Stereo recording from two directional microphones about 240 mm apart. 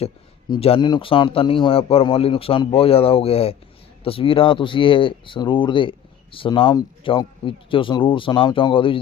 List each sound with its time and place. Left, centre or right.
0.5 s a man's voice: left